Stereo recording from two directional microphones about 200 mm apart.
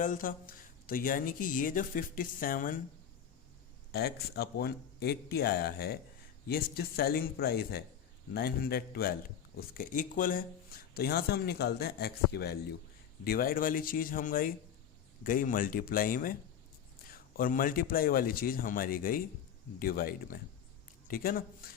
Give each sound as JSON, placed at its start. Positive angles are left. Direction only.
{"t": 0.0, "sound": "speech", "side_deg": 40}
{"t": 3.9, "sound": "speech", "side_deg": 50}
{"t": 17.3, "sound": "speech", "side_deg": 45}